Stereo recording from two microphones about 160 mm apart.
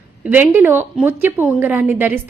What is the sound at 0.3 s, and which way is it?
A woman's voice, 10° right (ahead or behind).